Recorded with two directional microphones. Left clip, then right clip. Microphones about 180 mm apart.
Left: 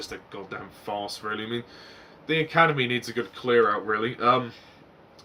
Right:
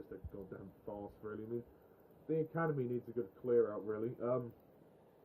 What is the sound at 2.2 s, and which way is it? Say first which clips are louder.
Speech: left 16 dB; 10° left (ahead or behind).